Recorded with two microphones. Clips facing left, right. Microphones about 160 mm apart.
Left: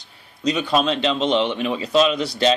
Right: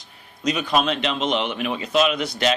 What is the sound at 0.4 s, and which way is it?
Speech, 30° left (ahead or behind).